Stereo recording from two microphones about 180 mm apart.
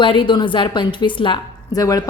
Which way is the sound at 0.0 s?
30° left (ahead or behind).